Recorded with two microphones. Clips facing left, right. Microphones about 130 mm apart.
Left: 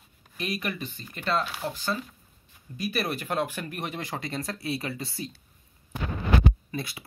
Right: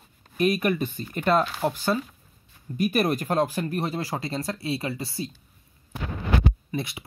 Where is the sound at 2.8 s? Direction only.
45° right (ahead or behind); by 5.3 s 25° right (ahead or behind).